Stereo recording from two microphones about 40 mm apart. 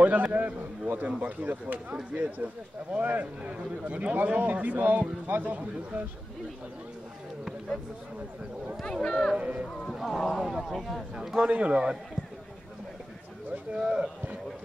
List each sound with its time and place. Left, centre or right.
0.0 s a man's voice: right
4.1 s a man's voice: right
9.0 s speech: centre
9.4 s a man's voice: right
10.0 s speech: centre
10.8 s speech: centre
11.1 s a man's voice: right
13.7 s a man's voice: right